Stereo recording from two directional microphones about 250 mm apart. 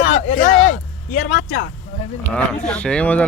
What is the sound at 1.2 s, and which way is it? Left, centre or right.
Speech, left.